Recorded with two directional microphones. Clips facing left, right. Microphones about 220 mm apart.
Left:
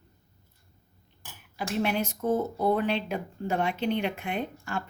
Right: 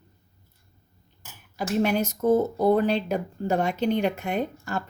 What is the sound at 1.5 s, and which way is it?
A woman's voice, 40° right (ahead or behind).